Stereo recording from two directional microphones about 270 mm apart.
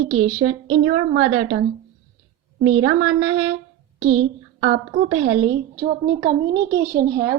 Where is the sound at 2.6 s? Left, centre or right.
Right.